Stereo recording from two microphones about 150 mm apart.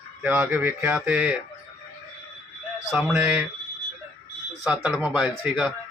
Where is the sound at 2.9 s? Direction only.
Centre (ahead or behind).